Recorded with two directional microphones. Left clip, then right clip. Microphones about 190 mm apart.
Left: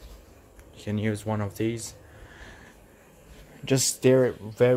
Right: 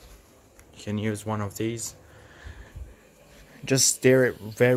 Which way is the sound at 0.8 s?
5° right (ahead or behind).